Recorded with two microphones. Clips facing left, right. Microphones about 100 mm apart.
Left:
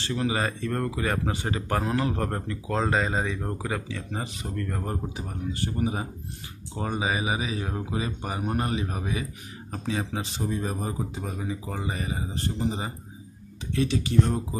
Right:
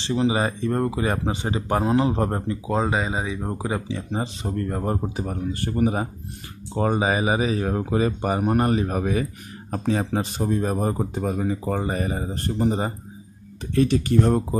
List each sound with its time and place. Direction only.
0.0 s speech: 20° right (ahead or behind); by 14.6 s 55° right (ahead or behind)